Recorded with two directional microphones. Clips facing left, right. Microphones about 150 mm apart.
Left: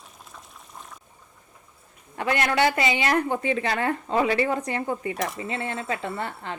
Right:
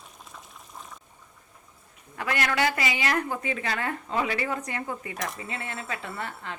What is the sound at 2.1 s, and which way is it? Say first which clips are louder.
A woman's voice: left 4 dB; 30° left (ahead or behind).